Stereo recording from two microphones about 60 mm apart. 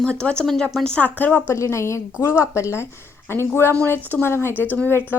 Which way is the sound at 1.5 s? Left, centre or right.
Left.